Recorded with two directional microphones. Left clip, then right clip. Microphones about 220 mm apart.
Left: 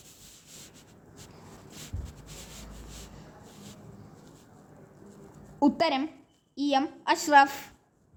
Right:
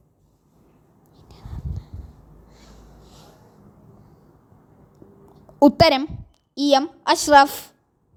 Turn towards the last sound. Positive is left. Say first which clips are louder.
# right 7 dB
turn(degrees=-25)  # may be behind; listen again after turning